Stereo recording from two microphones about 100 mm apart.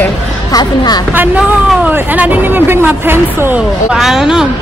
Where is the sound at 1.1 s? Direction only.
20° right (ahead or behind).